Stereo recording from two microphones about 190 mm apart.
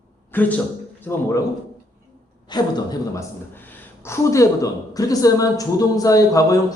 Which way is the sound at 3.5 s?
10° left (ahead or behind).